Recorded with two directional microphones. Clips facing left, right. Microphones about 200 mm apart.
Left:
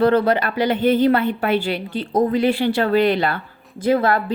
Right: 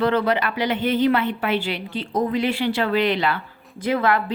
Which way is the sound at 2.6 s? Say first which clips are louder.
Left 4 dB; 50° left (ahead or behind).